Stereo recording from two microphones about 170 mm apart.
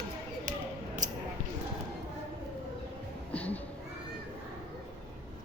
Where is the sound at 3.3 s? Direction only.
10° left (ahead or behind).